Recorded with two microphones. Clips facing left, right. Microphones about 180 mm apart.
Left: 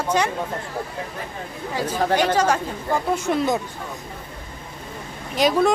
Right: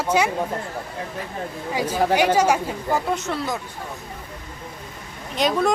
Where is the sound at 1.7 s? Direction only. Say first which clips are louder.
Right 1 dB; 10° right (ahead or behind).